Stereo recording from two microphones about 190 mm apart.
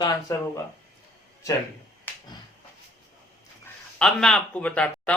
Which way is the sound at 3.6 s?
5° left (ahead or behind).